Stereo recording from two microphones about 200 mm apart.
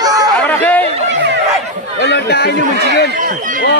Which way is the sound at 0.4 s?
10° left (ahead or behind).